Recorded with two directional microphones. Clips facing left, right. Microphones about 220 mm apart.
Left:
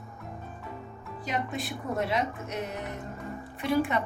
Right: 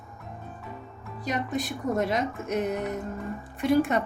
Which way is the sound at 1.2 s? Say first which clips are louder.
Right 3 dB; 45° right (ahead or behind).